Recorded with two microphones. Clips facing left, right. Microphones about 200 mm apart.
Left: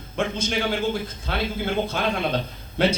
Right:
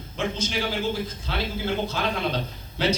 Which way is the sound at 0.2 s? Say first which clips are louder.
Left 3 dB; 55° left (ahead or behind).